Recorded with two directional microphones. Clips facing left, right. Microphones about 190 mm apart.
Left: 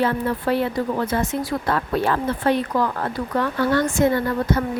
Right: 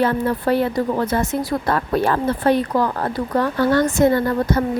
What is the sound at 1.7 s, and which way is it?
Speech, 40° right (ahead or behind).